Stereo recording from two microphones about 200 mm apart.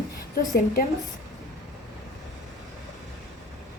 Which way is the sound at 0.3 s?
45° left (ahead or behind).